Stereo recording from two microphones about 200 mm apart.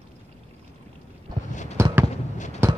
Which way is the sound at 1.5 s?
35° left (ahead or behind).